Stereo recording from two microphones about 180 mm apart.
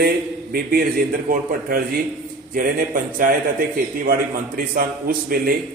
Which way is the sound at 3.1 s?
50° right (ahead or behind).